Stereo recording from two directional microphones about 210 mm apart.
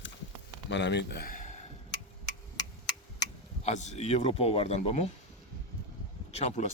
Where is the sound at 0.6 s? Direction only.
55° left (ahead or behind); by 1.6 s 40° left (ahead or behind).